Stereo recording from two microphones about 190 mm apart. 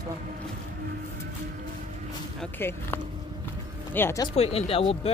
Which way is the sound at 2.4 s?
10° left (ahead or behind).